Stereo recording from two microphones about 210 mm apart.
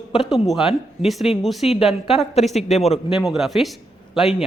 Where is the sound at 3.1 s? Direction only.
Centre (ahead or behind).